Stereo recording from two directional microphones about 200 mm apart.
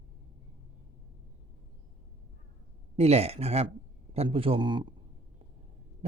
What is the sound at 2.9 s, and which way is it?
Speech, 30° right (ahead or behind).